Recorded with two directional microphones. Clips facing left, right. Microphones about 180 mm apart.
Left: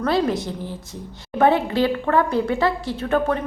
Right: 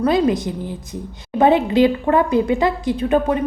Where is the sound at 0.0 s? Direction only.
15° right (ahead or behind).